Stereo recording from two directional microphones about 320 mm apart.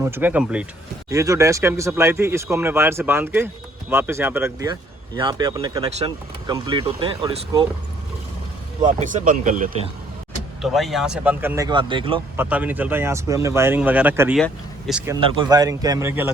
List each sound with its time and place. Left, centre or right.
0.0 s speech: centre
8.8 s speech: right
10.6 s speech: centre
12.5 s speech: centre